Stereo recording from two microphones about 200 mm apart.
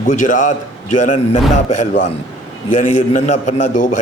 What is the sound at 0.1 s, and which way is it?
A man's voice, 40° left (ahead or behind).